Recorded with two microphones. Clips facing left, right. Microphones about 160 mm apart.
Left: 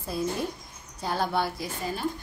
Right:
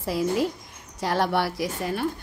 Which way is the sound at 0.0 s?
90° right.